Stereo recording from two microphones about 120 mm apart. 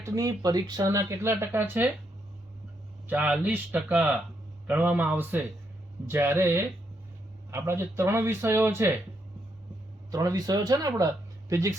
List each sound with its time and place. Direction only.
0.0 s speech: 25° right (ahead or behind)
3.1 s speech: 10° right (ahead or behind)
10.1 s speech: 30° right (ahead or behind)